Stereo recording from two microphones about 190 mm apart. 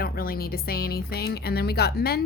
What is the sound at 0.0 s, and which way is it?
Speech, 50° left (ahead or behind).